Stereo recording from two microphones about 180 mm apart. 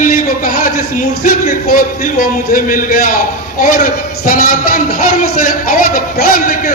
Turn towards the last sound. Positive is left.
turn(degrees=50)  # may be behind; listen again after turning